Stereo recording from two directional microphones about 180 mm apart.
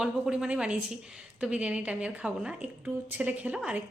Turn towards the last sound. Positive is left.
turn(degrees=-5)  # may be behind; listen again after turning